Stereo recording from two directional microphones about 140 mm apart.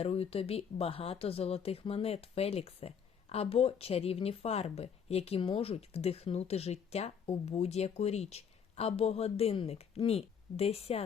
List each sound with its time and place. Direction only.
0.0 s speech: 45° left (ahead or behind)